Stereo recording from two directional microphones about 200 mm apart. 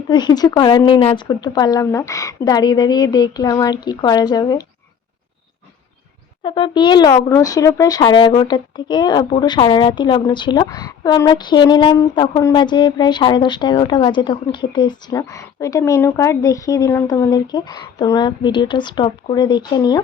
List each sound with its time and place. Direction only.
0.1 s speech: 20° left (ahead or behind)
6.4 s speech: 25° left (ahead or behind)